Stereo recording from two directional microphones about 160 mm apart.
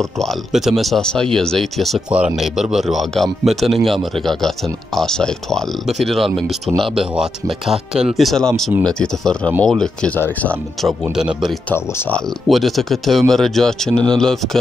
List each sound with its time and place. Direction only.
0.2 s speech: centre (ahead or behind)
10.8 s speech: centre (ahead or behind)